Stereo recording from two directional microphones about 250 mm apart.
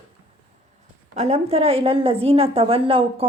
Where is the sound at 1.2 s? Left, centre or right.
Right.